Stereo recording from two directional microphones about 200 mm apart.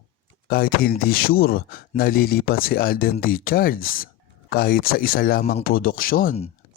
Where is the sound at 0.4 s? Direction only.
50° left (ahead or behind).